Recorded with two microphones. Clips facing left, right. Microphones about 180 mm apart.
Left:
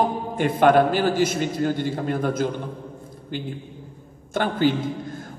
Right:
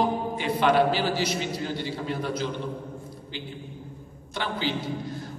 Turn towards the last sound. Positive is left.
turn(degrees=50)  # may be behind; listen again after turning